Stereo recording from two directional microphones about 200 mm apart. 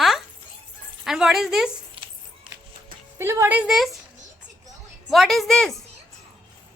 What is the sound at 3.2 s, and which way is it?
Speech, 10° right (ahead or behind).